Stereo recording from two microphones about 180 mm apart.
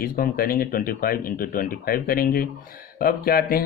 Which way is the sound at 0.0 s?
55° left (ahead or behind).